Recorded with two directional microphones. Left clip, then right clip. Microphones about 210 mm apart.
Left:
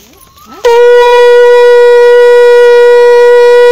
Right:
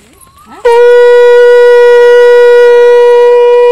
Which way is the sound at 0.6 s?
50° left (ahead or behind).